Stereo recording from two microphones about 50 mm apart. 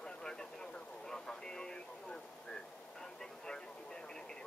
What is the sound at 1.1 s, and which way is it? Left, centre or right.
Radio, centre.